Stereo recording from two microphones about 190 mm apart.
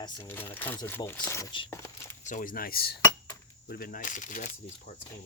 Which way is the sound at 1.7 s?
15° left (ahead or behind).